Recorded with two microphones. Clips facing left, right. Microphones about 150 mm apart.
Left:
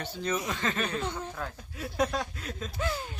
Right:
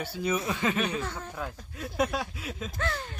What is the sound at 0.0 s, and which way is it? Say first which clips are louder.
Speech: right 2 dB; 10° right (ahead or behind).